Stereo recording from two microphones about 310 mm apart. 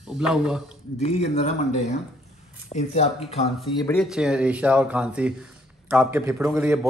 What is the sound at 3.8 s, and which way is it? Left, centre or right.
Speech, centre.